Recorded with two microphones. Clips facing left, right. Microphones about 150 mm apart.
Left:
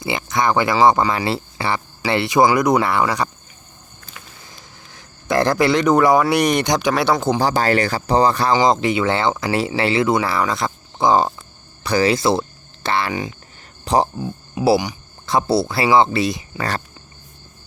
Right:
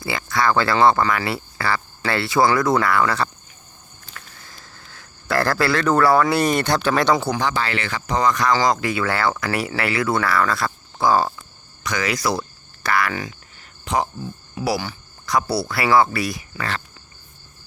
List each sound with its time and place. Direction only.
0.0 s speech: 20° left (ahead or behind)
4.9 s a man's voice: 20° left (ahead or behind)
7.3 s speech: 40° left (ahead or behind); by 11.3 s 20° left (ahead or behind)
11.8 s speech: 30° left (ahead or behind)
13.8 s speech: 35° left (ahead or behind)